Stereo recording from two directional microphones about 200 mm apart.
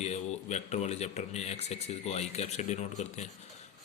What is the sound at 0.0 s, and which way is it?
Speech, 35° left (ahead or behind).